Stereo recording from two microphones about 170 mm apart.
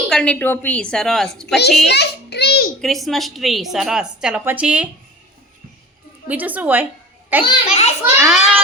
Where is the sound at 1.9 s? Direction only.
75° left (ahead or behind).